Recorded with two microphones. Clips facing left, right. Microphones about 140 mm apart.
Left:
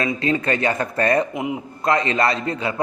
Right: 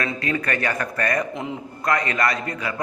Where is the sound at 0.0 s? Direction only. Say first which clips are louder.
Left 4 dB; 25° left (ahead or behind).